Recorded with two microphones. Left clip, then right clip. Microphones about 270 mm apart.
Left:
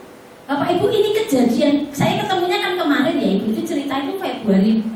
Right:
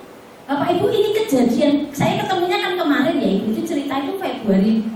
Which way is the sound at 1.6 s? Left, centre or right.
Centre.